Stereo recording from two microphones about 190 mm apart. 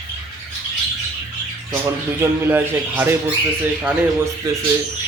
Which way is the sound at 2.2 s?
10° right (ahead or behind).